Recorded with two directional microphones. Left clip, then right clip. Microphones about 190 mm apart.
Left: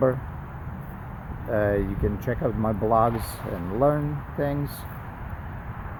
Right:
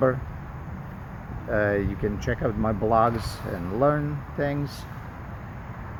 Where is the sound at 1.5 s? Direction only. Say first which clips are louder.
Even; 10° left (ahead or behind).